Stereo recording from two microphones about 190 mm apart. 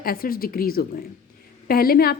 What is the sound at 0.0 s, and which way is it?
A woman's voice, 50° left (ahead or behind).